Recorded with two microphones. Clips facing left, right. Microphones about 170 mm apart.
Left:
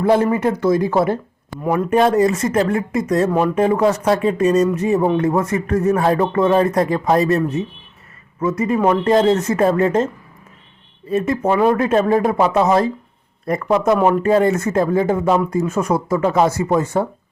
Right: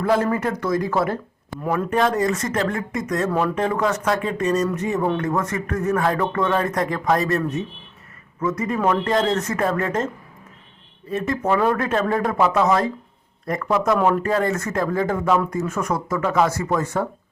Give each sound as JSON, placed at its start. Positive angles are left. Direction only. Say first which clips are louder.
{"t": 0.0, "sound": "speech", "louder": "left 5 dB", "side_deg": 25}
{"t": 11.1, "sound": "speech", "louder": "left 4 dB", "side_deg": 25}